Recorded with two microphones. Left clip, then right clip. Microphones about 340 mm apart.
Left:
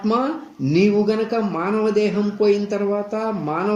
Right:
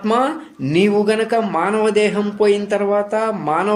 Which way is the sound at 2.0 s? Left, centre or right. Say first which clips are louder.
Right 3 dB; right.